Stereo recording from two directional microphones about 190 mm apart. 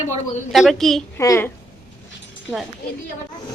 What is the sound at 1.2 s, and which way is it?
Speech, 15° left (ahead or behind).